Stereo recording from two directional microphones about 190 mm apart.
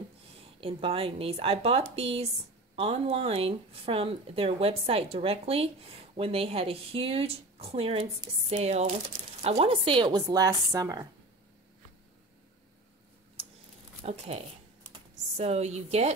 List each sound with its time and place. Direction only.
0.6 s speech: 30° right (ahead or behind)
14.0 s speech: 35° right (ahead or behind)
14.9 s computer keyboard: 35° right (ahead or behind)